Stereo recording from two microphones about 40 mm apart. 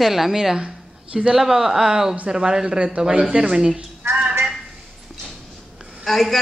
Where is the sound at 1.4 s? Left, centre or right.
Centre.